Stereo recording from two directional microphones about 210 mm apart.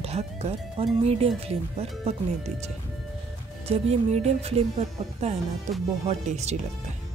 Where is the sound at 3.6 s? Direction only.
30° right (ahead or behind).